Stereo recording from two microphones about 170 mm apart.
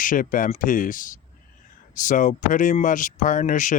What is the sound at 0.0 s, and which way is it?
Speech, 55° left (ahead or behind).